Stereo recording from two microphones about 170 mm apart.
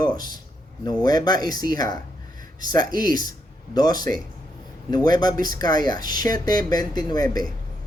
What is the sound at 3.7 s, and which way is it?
Speech, 25° left (ahead or behind).